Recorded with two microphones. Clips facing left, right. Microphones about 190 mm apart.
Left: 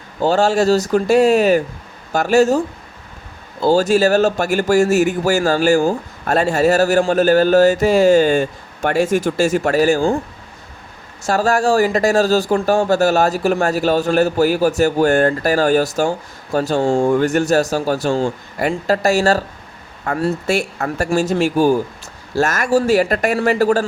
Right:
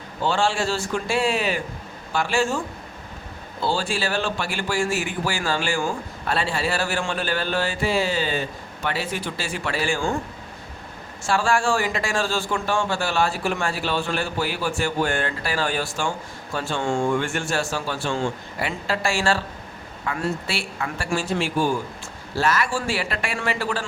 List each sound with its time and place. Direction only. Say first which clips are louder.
0.2 s a man's voice: left 8 dB; 40° left (ahead or behind)
11.2 s a man's voice: left 6 dB; 40° left (ahead or behind)